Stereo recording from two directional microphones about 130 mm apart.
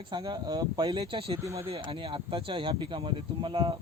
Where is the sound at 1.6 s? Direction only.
45° right (ahead or behind).